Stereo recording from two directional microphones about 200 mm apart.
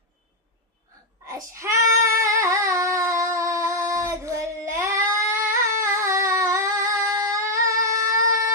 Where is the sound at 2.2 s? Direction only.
15° right (ahead or behind).